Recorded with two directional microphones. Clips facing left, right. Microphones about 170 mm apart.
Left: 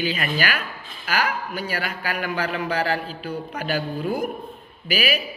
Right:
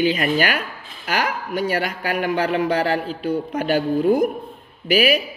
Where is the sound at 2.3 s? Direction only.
25° right (ahead or behind).